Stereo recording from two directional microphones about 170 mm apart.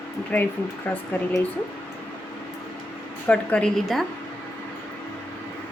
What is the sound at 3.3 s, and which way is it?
Speech, 5° left (ahead or behind).